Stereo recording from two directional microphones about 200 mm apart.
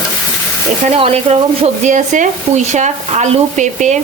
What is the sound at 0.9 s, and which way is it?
Speech, 30° right (ahead or behind).